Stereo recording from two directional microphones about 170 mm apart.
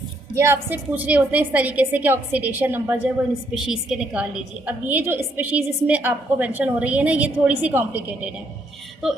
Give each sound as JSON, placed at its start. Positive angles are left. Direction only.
{"t": 0.3, "sound": "a woman's voice", "side_deg": -15}